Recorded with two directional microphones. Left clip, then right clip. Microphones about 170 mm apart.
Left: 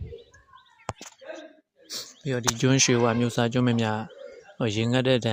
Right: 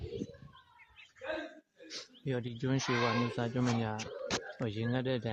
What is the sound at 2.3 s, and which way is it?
Speech, 45° left (ahead or behind).